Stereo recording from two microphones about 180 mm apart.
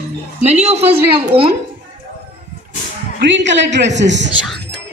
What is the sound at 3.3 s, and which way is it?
Speech, 85° right.